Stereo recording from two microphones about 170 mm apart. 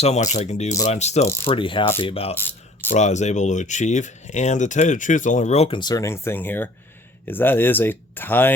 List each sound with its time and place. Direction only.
0.0 s speech: 40° left (ahead or behind)
1.5 s speech: 30° left (ahead or behind)
2.3 s mechanisms: 10° left (ahead or behind)
2.9 s speech: 45° left (ahead or behind); by 8.5 s 10° left (ahead or behind)